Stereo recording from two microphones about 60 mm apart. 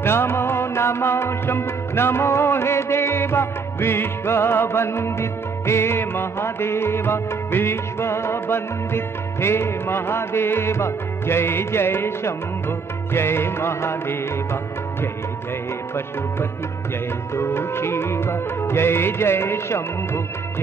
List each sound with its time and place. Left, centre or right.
0.0 s music: left
17.4 s music: left